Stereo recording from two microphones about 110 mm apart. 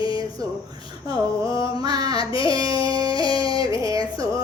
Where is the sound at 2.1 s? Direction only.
50° left (ahead or behind).